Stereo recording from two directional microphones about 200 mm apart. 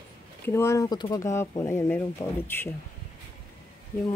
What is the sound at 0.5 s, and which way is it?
Speech, 15° left (ahead or behind).